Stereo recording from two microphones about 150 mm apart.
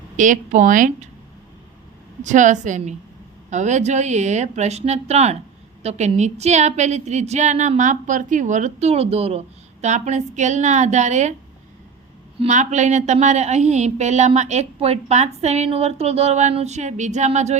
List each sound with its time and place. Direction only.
0.2 s speech: 55° right (ahead or behind)
2.2 s a woman's voice: 55° right (ahead or behind)
12.4 s a woman's voice: 50° right (ahead or behind)